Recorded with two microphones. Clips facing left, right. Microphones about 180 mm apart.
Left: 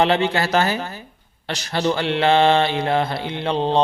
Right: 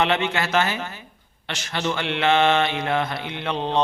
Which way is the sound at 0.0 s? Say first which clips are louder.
Left 4 dB; 35° left (ahead or behind).